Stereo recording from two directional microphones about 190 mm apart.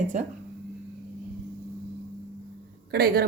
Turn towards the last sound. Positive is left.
turn(degrees=-55)  # may be behind; listen again after turning